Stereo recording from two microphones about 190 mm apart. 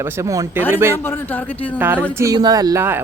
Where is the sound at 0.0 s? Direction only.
15° right (ahead or behind).